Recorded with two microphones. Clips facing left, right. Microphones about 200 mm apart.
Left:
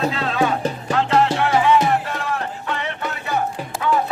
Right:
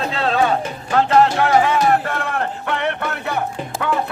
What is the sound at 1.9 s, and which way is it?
Music, 60° right (ahead or behind).